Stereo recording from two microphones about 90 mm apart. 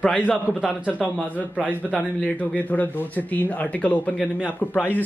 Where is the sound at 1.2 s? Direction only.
15° left (ahead or behind).